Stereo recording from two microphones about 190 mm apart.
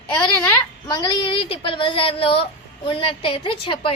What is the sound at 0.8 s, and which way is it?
Speech, 20° left (ahead or behind).